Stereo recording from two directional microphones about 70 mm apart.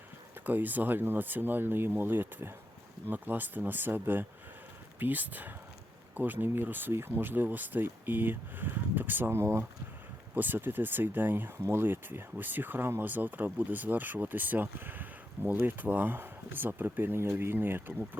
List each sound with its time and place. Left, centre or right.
0.4 s speech: right